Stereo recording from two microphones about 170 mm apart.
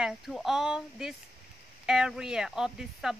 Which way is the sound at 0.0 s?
Centre (ahead or behind).